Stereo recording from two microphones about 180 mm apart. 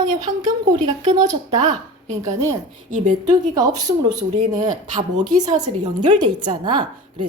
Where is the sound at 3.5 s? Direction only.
20° right (ahead or behind).